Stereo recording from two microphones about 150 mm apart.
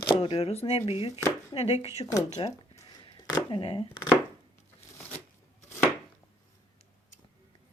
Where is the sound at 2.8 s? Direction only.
30° left (ahead or behind).